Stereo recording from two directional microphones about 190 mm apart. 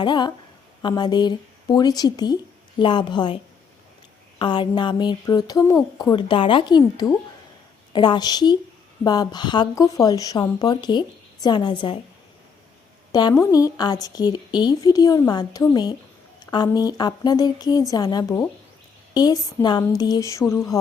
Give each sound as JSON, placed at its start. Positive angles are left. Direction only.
{"t": 0.0, "sound": "a woman's voice", "side_deg": 25}
{"t": 4.4, "sound": "a woman's voice", "side_deg": 25}
{"t": 13.1, "sound": "a sound", "side_deg": 20}
{"t": 13.3, "sound": "a woman's voice", "side_deg": 15}